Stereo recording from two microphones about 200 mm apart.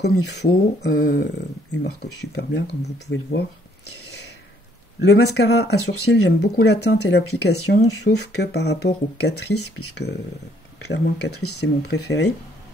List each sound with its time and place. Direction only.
0.0 s speech: 55° left (ahead or behind)
5.0 s speech: 60° left (ahead or behind)
9.6 s speech: 90° left
10.9 s speech: 55° left (ahead or behind)